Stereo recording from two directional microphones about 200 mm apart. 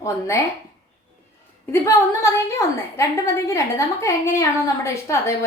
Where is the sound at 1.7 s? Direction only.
15° left (ahead or behind).